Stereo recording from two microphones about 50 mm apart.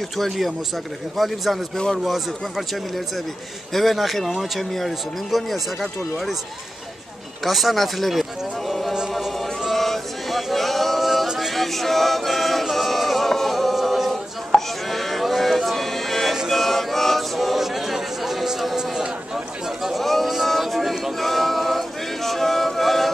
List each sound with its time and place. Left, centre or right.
1.1 s speech: centre
7.4 s speech: centre
9.1 s a sound: centre
11.3 s a capella: centre
14.5 s chopping: left
14.9 s a sound: centre